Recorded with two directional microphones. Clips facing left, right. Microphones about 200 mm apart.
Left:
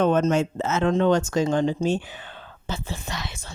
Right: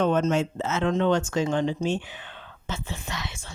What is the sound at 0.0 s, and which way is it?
Speech, 45° left (ahead or behind).